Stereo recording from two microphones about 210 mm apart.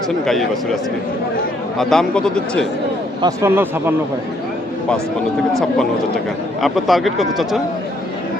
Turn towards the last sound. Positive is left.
turn(degrees=0)  # may be behind; listen again after turning